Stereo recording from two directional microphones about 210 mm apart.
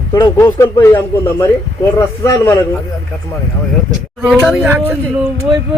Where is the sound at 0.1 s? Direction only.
15° left (ahead or behind).